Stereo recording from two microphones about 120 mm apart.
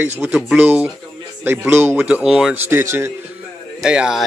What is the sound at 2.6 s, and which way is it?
Speech, 20° right (ahead or behind).